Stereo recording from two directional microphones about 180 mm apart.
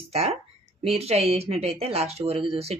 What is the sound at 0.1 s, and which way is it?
A woman's voice, 35° right (ahead or behind).